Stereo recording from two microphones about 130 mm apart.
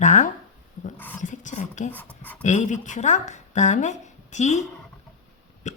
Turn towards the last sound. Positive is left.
turn(degrees=65)  # may be behind; listen again after turning